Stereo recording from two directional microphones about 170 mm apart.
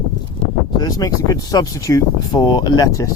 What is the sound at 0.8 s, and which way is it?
Speech, 20° left (ahead or behind).